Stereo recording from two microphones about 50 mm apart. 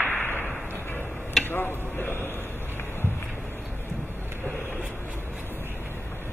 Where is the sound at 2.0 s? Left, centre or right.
Left.